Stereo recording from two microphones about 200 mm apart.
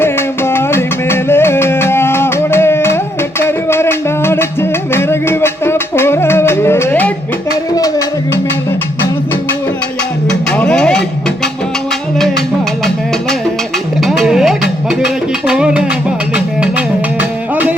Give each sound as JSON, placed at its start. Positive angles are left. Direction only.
{"t": 0.0, "sound": "music", "side_deg": 10}
{"t": 10.2, "sound": "music", "side_deg": 5}
{"t": 14.0, "sound": "a sound", "side_deg": 0}
{"t": 14.8, "sound": "music", "side_deg": -5}